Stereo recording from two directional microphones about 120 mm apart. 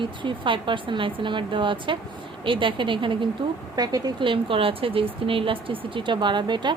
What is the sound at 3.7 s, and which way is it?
A woman's voice, 35° right (ahead or behind).